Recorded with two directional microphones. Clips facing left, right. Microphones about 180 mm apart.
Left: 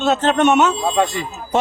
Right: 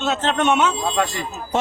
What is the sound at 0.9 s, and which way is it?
Speech, 20° left (ahead or behind).